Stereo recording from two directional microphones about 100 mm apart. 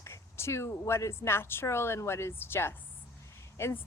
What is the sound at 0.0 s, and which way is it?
Speech, 25° left (ahead or behind).